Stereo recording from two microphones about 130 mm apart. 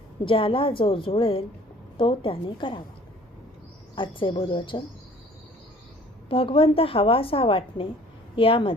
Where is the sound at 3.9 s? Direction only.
40° left (ahead or behind).